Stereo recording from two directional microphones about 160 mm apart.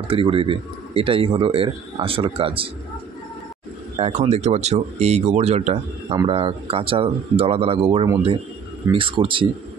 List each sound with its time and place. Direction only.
0.1 s a man's voice: 35° right (ahead or behind)
4.0 s a man's voice: 40° right (ahead or behind)